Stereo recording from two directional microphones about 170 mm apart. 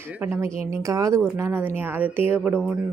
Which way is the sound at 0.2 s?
15° right (ahead or behind).